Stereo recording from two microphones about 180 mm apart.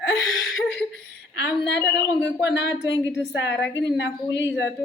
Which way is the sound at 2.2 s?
80° left.